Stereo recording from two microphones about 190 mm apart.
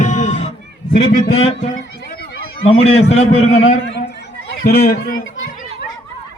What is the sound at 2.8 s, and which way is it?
Speech, 30° left (ahead or behind).